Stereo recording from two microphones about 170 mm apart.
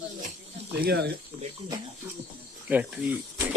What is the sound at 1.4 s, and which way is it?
Speech, 30° right (ahead or behind).